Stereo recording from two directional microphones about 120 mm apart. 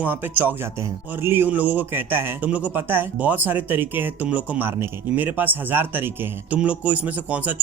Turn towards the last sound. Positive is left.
turn(degrees=-10)  # may be behind; listen again after turning